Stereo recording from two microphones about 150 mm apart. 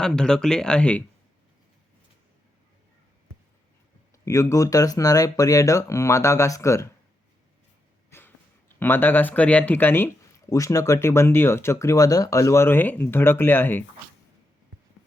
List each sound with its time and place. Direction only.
0.0 s speech: 5° left (ahead or behind)
4.3 s speech: 20° left (ahead or behind)
8.1 s a sound: 15° left (ahead or behind)
8.8 s speech: 15° left (ahead or behind)